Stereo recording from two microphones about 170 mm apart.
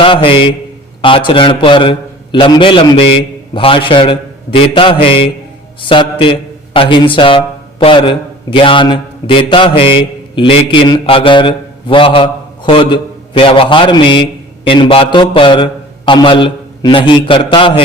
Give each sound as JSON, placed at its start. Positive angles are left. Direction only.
{"t": 0.0, "sound": "a man's voice", "side_deg": 30}